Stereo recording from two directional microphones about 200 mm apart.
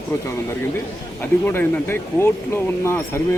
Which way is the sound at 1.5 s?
10° left (ahead or behind).